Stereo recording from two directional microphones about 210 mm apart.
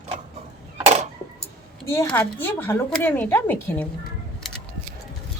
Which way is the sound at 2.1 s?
10° left (ahead or behind).